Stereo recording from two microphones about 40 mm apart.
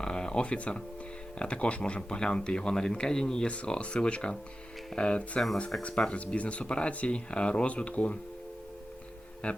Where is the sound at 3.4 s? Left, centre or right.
Left.